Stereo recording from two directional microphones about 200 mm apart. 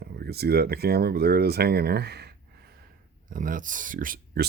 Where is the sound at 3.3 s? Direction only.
40° right (ahead or behind).